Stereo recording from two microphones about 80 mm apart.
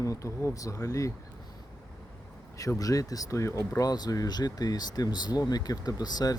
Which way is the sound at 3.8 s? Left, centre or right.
Left.